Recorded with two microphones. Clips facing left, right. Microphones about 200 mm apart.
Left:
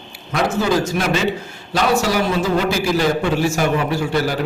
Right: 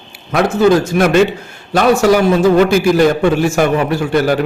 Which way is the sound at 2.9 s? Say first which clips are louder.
Right 6 dB; 55° right (ahead or behind).